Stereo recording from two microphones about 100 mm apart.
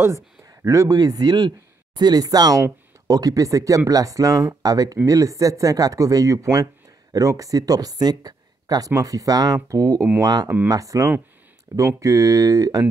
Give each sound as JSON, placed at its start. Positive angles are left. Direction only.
{"t": 0.0, "sound": "speech", "side_deg": -30}